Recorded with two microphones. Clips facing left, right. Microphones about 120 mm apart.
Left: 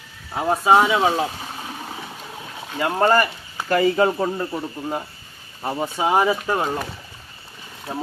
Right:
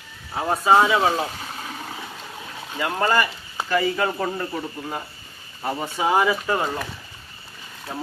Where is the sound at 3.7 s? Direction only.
40° left (ahead or behind).